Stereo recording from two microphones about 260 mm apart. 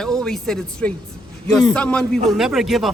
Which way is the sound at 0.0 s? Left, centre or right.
Centre.